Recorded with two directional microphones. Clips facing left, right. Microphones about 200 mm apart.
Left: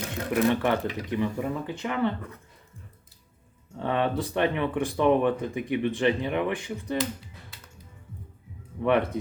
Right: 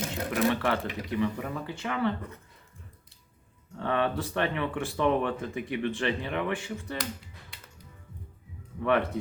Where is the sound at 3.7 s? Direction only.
15° left (ahead or behind).